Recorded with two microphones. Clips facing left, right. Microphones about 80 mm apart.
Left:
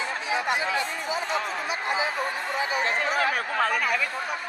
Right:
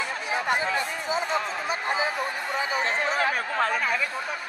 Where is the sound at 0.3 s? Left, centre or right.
Right.